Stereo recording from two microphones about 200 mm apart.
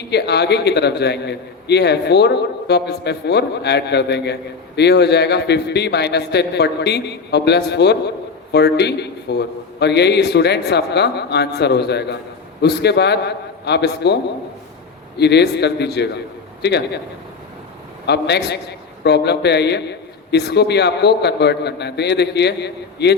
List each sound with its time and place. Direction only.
0.1 s a man's voice: 55° left (ahead or behind)
15.2 s a man's voice: 55° left (ahead or behind)
18.0 s a man's voice: 55° left (ahead or behind)